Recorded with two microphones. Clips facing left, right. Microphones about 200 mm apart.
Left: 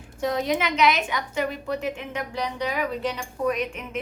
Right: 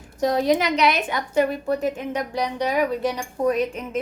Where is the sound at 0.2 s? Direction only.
35° right (ahead or behind).